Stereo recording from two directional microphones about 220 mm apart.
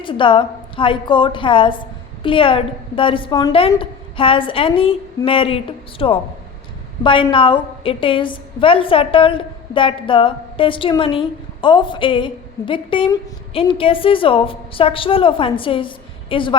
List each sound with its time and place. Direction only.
0.0 s a woman's voice: 20° left (ahead or behind)